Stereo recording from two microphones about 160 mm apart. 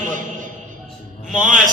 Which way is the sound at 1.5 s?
55° right (ahead or behind).